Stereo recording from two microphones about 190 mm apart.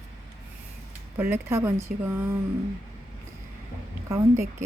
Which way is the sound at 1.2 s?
10° right (ahead or behind).